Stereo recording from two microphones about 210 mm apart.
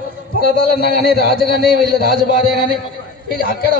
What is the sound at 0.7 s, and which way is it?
Speech, 50° left (ahead or behind).